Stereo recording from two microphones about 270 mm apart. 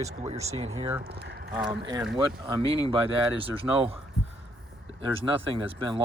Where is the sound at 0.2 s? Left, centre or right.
Right.